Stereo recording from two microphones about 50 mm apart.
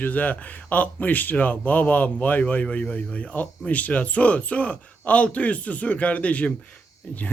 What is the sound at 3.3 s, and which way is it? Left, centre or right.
A man's voice, left.